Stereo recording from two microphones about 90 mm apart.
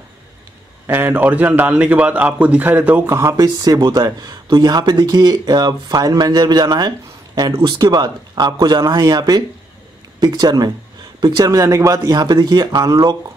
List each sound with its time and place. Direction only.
0.8 s a man's voice: 20° right (ahead or behind)
3.1 s speech: 35° right (ahead or behind)
3.5 s speech: 50° right (ahead or behind)
11.4 s speech: 35° right (ahead or behind)